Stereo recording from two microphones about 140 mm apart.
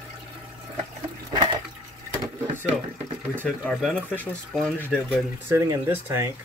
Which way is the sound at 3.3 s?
10° left (ahead or behind).